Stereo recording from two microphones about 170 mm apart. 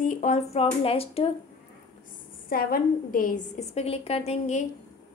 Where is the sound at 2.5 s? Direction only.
60° left (ahead or behind).